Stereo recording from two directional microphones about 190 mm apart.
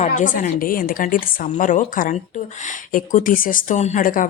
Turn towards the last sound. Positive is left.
turn(degrees=45)  # may be behind; listen again after turning